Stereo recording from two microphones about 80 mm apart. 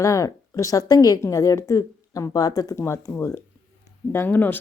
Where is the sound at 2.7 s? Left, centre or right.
Left.